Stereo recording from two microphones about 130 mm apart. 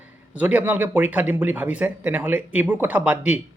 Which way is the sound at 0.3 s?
10° right (ahead or behind).